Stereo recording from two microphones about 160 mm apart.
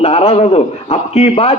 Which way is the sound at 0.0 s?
40° left (ahead or behind).